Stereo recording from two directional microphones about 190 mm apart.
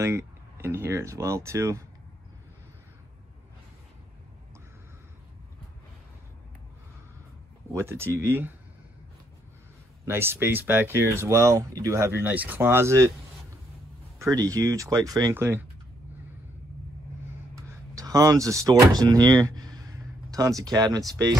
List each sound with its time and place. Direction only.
0.0 s speech: 15° right (ahead or behind)
7.7 s speech: 15° right (ahead or behind)
10.0 s speech: 10° right (ahead or behind)
14.1 s speech: 15° right (ahead or behind)
17.6 s speech: 15° right (ahead or behind)